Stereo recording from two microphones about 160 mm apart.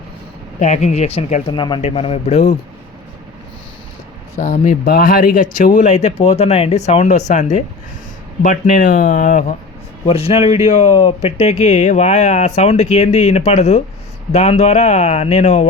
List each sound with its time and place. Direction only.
0.6 s speech: 45° left (ahead or behind)
4.4 s speech: 50° left (ahead or behind)
10.1 s speech: 35° left (ahead or behind)